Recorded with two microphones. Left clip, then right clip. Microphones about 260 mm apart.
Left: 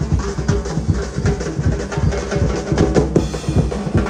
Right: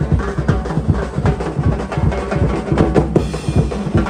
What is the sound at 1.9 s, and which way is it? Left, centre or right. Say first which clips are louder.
Drum: even; right.